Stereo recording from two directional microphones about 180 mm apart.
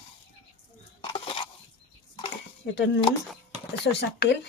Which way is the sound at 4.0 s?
70° left (ahead or behind).